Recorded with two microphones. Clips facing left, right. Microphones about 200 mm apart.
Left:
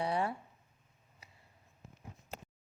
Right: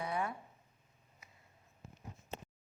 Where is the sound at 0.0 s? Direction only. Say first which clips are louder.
Left 4 dB; 30° left (ahead or behind).